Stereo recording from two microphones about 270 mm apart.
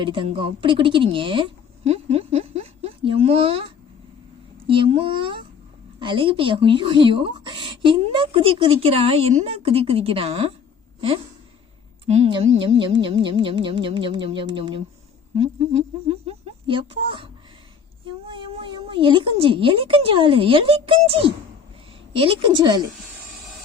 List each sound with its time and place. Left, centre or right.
0.0 s speech: centre
12.0 s speech: right
18.3 s speech: centre